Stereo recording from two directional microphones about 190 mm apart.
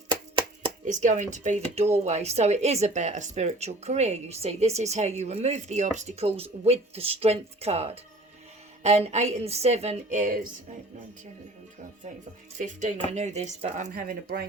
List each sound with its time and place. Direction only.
0.9 s speech: 40° right (ahead or behind)
12.5 s speech: 40° right (ahead or behind)